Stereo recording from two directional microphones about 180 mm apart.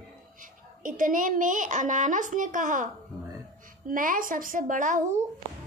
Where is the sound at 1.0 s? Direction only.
50° right (ahead or behind).